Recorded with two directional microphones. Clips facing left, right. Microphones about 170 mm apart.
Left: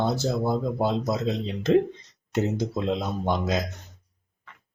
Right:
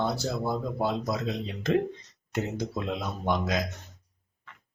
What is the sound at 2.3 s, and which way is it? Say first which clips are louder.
Speech: left 5 dB; 25° left (ahead or behind).